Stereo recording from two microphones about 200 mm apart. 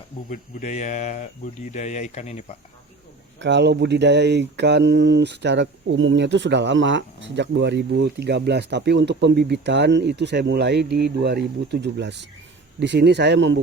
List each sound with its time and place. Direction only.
0.3 s speech: 35° left (ahead or behind)
3.4 s speech: 60° right (ahead or behind)